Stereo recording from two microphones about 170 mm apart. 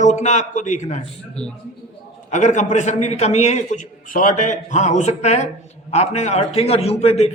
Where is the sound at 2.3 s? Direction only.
45° left (ahead or behind).